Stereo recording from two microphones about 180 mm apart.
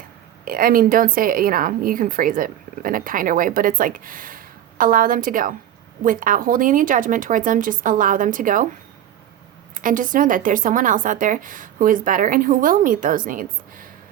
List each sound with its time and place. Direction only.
0.4 s a woman's voice: 50° right (ahead or behind)
9.7 s a woman's voice: 45° right (ahead or behind)